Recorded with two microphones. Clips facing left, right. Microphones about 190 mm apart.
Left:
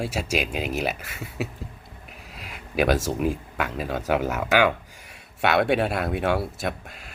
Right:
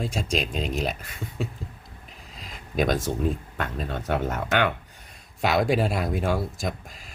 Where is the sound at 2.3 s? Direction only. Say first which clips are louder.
Left 1 dB; 70° left (ahead or behind).